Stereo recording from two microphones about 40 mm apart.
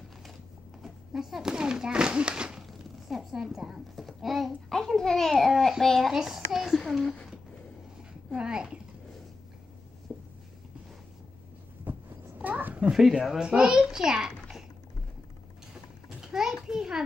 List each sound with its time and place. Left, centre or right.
0.8 s speech: centre
2.6 s a sound: centre
3.4 s a child's voice: centre
4.6 s a child's voice: centre
5.5 s a child's voice: centre
6.1 s a child's voice: centre
8.3 s speech: right
10.1 s a sound: centre
11.9 s vehicle: right
12.4 s a sound: right
13.1 s a child's voice: centre
13.4 s a child's voice: right
13.7 s a child's voice: centre
16.2 s a sound: centre